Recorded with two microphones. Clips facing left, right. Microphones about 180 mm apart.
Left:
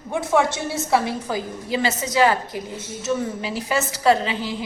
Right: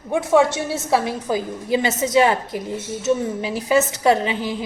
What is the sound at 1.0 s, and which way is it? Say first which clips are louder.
A woman's voice: right 3 dB; 20° right (ahead or behind).